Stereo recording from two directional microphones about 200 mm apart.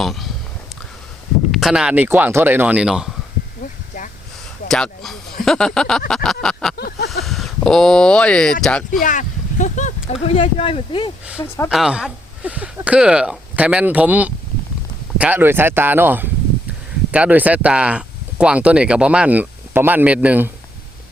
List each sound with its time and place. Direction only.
0.0 s speech: centre (ahead or behind)
1.5 s speech: centre (ahead or behind)
3.6 s a sound: 40° left (ahead or behind)
4.7 s speech: centre (ahead or behind)
6.2 s a sound: 5° left (ahead or behind)
6.7 s a sound: 55° left (ahead or behind)
7.3 s speech: centre (ahead or behind)
8.9 s speech: 40° left (ahead or behind)
11.3 s speech: 10° left (ahead or behind)
11.7 s speech: 5° right (ahead or behind)